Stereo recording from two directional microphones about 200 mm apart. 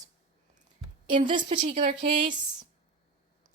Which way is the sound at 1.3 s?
25° right (ahead or behind).